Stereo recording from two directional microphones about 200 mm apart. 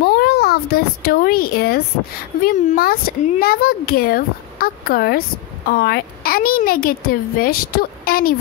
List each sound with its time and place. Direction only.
0.0 s a child's voice: 50° left (ahead or behind)